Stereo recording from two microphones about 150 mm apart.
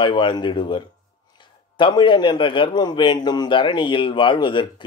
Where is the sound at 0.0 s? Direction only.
30° left (ahead or behind).